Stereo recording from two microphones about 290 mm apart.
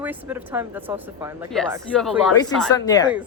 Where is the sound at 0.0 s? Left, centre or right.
Centre.